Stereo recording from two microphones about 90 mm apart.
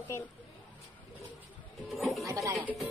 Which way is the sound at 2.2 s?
35° right (ahead or behind).